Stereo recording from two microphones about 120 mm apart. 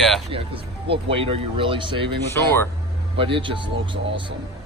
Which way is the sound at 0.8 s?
50° right (ahead or behind).